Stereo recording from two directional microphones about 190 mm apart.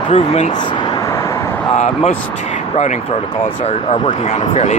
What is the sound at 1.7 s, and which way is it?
Speech, 35° left (ahead or behind).